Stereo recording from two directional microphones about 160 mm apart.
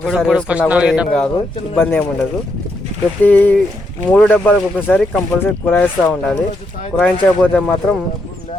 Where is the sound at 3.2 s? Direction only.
10° left (ahead or behind).